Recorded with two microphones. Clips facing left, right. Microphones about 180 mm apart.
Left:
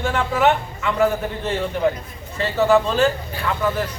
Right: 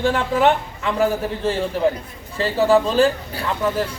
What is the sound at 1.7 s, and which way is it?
A man's voice, 35° right (ahead or behind).